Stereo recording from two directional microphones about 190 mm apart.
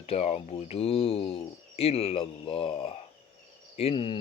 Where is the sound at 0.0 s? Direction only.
35° left (ahead or behind).